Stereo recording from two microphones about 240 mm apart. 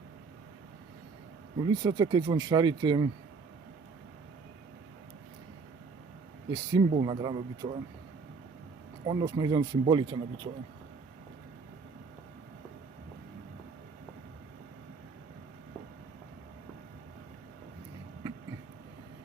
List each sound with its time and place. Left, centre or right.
1.5 s speech: centre
6.5 s speech: centre
9.0 s speech: centre